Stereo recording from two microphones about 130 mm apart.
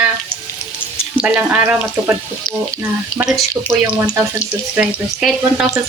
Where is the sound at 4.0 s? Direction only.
20° right (ahead or behind).